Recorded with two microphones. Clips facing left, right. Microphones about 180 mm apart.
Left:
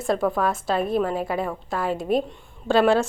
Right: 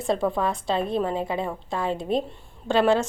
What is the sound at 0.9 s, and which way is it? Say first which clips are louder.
A woman's voice: left 2 dB; 20° right (ahead or behind).